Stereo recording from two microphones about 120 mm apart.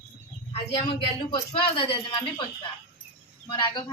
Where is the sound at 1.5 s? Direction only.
50° left (ahead or behind).